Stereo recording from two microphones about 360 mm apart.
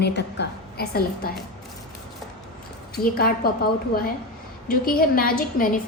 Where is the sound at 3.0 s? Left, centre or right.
Left.